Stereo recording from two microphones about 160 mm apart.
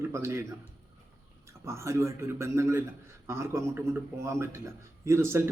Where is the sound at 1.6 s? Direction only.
20° right (ahead or behind).